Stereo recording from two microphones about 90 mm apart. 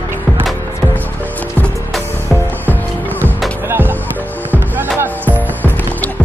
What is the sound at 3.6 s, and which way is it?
Music, 25° right (ahead or behind).